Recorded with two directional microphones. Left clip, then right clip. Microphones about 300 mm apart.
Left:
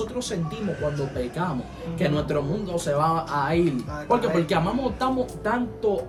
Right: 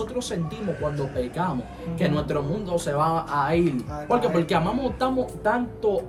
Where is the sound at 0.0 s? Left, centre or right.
Centre.